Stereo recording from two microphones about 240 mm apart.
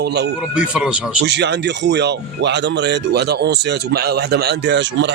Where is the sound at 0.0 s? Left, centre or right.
Right.